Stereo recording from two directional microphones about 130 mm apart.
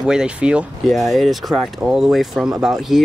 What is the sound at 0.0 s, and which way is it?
Speech, 5° right (ahead or behind).